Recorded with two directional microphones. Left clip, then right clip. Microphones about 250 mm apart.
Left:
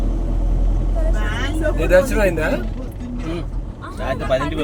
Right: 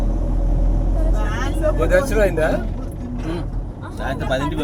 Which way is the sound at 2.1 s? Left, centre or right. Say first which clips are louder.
Right 1 dB; left.